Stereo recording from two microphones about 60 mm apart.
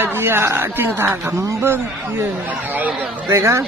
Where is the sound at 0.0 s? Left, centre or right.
Right.